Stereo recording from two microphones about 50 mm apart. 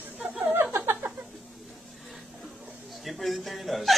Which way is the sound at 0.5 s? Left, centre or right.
Right.